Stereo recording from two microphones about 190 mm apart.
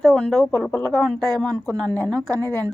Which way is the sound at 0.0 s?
5° left (ahead or behind).